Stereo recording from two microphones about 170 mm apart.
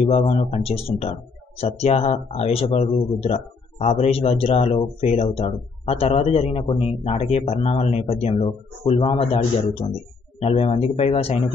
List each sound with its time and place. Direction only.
0.0 s speech: 40° left (ahead or behind)